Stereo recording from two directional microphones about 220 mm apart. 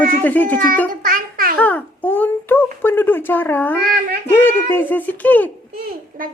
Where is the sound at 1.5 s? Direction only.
5° left (ahead or behind).